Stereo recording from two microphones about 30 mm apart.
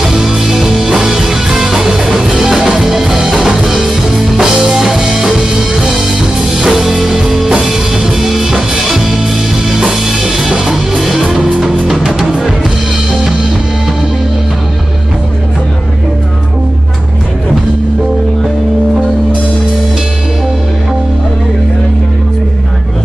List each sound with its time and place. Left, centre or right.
0.0 s music: centre
6.7 s music: centre